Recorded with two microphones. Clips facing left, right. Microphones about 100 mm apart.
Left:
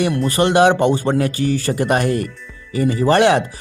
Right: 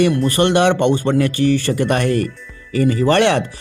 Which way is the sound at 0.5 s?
35° left (ahead or behind).